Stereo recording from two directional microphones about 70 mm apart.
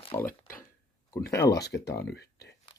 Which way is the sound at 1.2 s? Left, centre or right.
Left.